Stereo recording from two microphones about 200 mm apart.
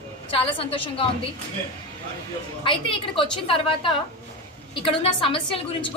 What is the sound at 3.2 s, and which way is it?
Speech, 25° left (ahead or behind).